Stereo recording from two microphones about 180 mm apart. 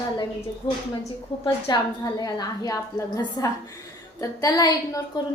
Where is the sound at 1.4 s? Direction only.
20° left (ahead or behind).